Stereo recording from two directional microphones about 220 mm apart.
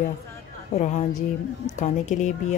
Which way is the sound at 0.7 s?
35° left (ahead or behind).